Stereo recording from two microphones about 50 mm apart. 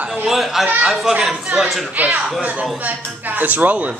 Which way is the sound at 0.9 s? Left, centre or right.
Centre.